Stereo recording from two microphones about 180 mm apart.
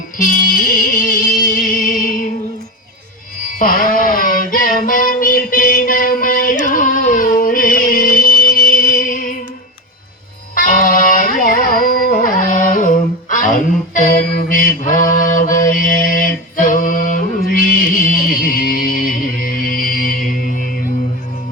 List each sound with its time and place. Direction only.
0.2 s music: 50° left (ahead or behind)
3.6 s a sound: 50° left (ahead or behind)
6.7 s music: 50° left (ahead or behind)
10.5 s music: 45° left (ahead or behind)